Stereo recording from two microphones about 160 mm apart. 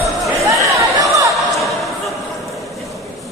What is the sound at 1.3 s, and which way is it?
Music, centre (ahead or behind).